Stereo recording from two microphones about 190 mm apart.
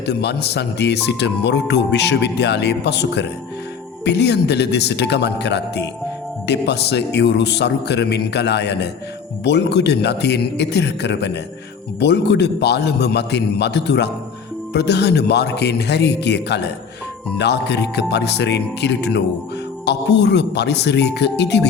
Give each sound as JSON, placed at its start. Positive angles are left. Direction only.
{"t": 0.0, "sound": "speech", "side_deg": 60}